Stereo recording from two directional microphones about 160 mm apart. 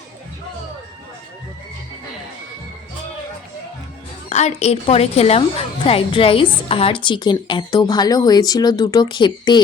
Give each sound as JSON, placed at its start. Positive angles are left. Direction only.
{"t": 4.3, "sound": "a woman's voice", "side_deg": 45}